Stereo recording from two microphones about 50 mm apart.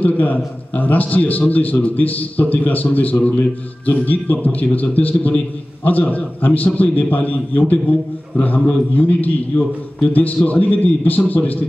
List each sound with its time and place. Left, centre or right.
0.0 s a man's voice: left